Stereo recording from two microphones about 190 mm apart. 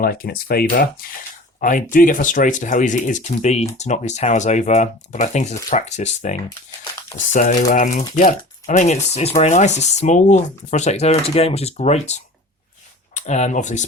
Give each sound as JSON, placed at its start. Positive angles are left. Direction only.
{"t": 0.0, "sound": "speech", "side_deg": 50}
{"t": 7.3, "sound": "speech", "side_deg": 40}